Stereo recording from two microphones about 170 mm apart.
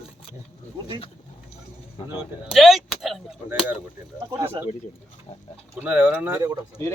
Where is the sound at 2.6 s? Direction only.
Centre (ahead or behind).